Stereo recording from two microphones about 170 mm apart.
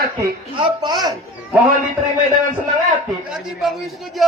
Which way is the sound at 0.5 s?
30° right (ahead or behind).